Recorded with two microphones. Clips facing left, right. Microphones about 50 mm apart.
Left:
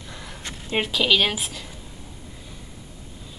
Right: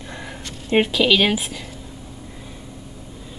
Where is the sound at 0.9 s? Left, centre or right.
Centre.